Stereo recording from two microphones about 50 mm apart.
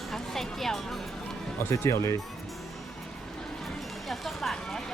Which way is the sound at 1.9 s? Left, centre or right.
Left.